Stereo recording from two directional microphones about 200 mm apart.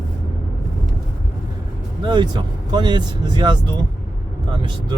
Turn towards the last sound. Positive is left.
turn(degrees=-20)  # may be behind; listen again after turning